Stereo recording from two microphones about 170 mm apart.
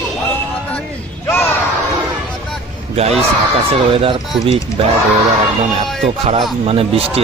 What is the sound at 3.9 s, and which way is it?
Speech, 35° right (ahead or behind).